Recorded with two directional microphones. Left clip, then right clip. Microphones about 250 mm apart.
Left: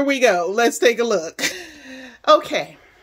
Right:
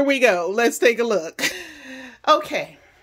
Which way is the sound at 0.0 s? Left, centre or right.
Centre.